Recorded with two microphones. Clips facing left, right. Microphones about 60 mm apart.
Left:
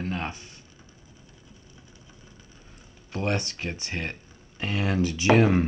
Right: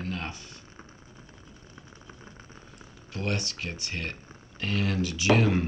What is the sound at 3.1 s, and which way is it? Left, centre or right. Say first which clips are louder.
Speech: left 4 dB; left.